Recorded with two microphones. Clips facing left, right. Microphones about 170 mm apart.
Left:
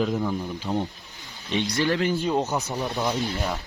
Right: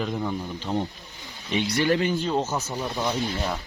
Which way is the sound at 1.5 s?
10° right (ahead or behind).